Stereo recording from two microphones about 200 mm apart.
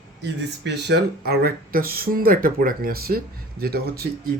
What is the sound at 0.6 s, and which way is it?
Speech, 60° right (ahead or behind).